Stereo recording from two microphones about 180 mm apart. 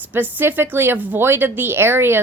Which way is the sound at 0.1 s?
10° right (ahead or behind).